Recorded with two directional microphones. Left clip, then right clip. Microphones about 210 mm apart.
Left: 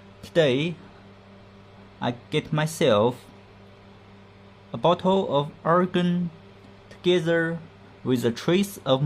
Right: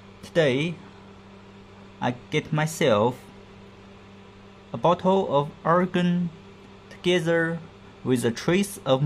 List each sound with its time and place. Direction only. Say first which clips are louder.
0.2 s speech: left 1 dB; centre (ahead or behind)
2.0 s speech: right 1 dB; centre (ahead or behind)
4.7 s speech: even; centre (ahead or behind)